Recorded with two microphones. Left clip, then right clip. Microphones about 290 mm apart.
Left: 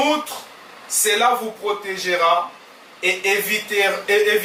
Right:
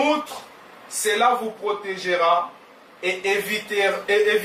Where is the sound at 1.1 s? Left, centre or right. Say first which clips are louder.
Left 1 dB; centre.